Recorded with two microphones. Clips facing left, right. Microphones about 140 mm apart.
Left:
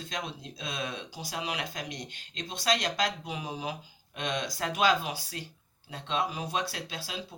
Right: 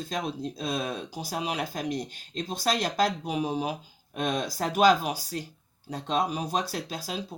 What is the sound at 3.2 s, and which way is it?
Speech, 40° right (ahead or behind).